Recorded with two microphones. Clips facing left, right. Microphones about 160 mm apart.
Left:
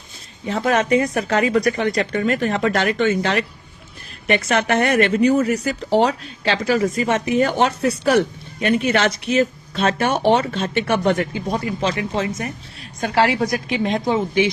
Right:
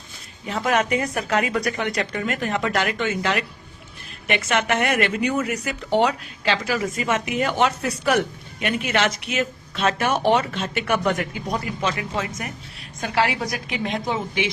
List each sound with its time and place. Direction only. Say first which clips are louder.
0.4 s speech: left 3 dB; 35° left (ahead or behind)